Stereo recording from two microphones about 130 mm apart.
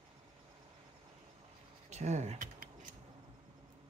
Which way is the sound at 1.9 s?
60° right (ahead or behind).